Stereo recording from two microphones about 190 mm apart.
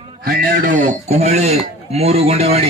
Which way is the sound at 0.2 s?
55° right (ahead or behind).